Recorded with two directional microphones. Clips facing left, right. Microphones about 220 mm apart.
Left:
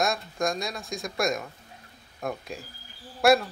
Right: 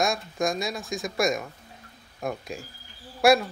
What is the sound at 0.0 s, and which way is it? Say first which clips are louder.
A man's voice: right 1 dB; centre (ahead or behind).